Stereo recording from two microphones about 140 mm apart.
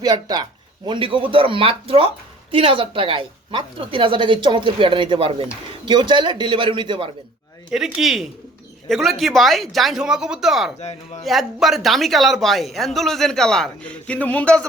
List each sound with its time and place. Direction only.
0.0 s speech: 25° right (ahead or behind)
0.9 s a woman's voice: 40° right (ahead or behind)
7.7 s speech: 5° right (ahead or behind)
10.8 s speech: 55° left (ahead or behind)
11.2 s speech: centre (ahead or behind)